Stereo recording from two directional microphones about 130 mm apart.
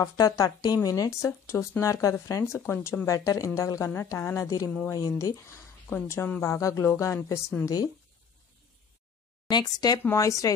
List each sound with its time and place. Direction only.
0.0 s speech: 25° left (ahead or behind)
9.5 s speech: 30° left (ahead or behind)